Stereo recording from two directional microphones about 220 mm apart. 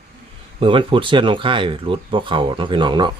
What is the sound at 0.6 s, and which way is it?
Speech, 25° right (ahead or behind).